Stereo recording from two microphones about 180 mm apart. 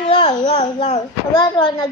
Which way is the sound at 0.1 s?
25° left (ahead or behind).